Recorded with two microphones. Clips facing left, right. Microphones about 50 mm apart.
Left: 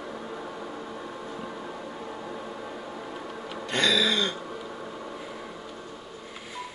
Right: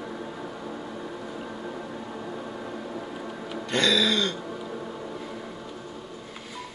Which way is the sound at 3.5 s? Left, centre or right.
Centre.